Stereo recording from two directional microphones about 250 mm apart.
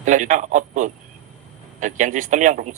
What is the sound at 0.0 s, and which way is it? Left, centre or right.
A man's voice, right.